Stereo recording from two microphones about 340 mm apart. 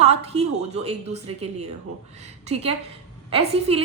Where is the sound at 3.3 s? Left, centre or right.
Centre.